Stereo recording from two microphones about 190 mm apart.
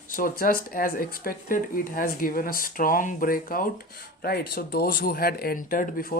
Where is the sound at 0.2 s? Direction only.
45° left (ahead or behind).